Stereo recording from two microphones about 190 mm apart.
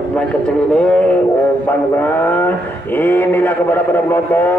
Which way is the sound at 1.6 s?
10° left (ahead or behind).